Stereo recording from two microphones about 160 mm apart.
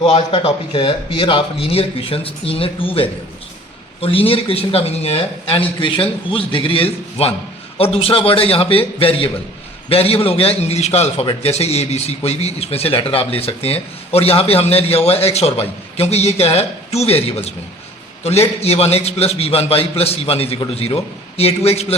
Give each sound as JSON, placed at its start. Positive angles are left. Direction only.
{"t": 0.0, "sound": "a man's voice", "side_deg": 40}